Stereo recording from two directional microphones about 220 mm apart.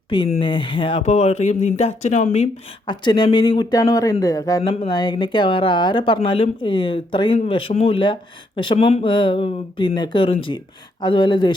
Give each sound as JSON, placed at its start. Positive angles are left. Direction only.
{"t": 0.1, "sound": "speech", "side_deg": 25}